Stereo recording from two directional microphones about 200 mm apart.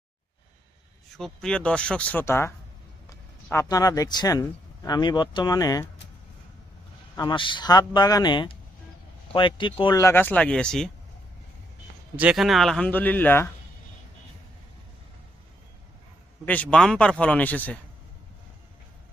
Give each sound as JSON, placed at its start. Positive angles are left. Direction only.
{"t": 1.1, "sound": "speech", "side_deg": 0}
{"t": 3.5, "sound": "speech", "side_deg": 15}
{"t": 7.2, "sound": "speech", "side_deg": 25}
{"t": 12.1, "sound": "speech", "side_deg": -5}
{"t": 16.5, "sound": "speech", "side_deg": 5}